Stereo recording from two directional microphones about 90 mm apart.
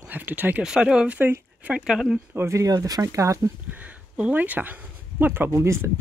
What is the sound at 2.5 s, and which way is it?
Speech, 40° right (ahead or behind).